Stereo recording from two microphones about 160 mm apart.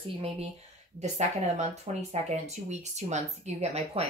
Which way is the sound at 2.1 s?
45° right (ahead or behind).